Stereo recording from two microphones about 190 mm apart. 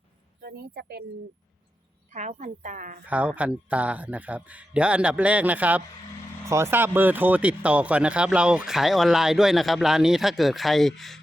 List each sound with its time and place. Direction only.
0.4 s speech: 55° right (ahead or behind)
2.1 s a woman's voice: 40° right (ahead or behind)
3.1 s speech: 5° right (ahead or behind)